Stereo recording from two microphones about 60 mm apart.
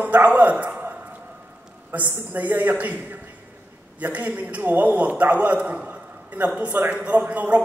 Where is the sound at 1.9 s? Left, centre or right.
Right.